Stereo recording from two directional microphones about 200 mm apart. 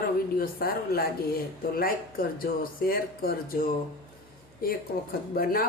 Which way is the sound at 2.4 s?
45° left (ahead or behind).